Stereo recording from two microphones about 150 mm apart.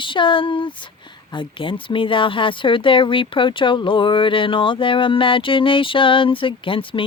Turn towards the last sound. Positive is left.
turn(degrees=35)  # may be behind; listen again after turning